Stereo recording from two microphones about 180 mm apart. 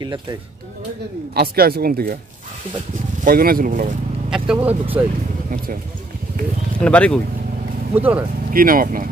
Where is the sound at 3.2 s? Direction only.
55° right (ahead or behind).